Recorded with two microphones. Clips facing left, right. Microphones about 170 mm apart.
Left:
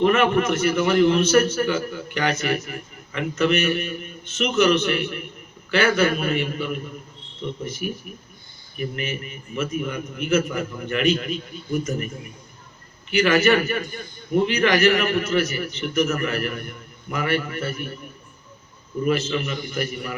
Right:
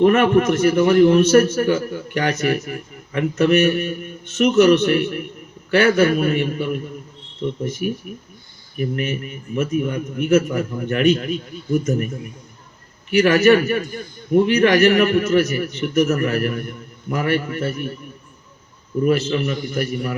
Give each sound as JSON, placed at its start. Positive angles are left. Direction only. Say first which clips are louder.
{"t": 0.0, "sound": "a man's voice", "louder": "right 4 dB", "side_deg": -40}
{"t": 8.8, "sound": "a man's voice", "louder": "right 5 dB", "side_deg": -50}
{"t": 13.2, "sound": "a man's voice", "louder": "right 4 dB", "side_deg": -40}
{"t": 14.6, "sound": "a man's voice", "louder": "right 3 dB", "side_deg": -50}
{"t": 19.0, "sound": "a man's voice", "louder": "right 4 dB", "side_deg": -45}